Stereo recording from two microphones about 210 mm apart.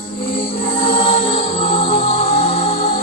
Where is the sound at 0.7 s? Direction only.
25° left (ahead or behind).